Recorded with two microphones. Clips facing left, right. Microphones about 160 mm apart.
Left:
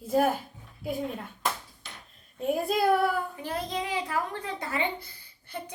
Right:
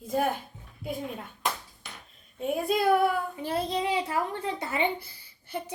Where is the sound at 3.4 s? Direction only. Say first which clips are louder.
Right 4 dB; 25° right (ahead or behind).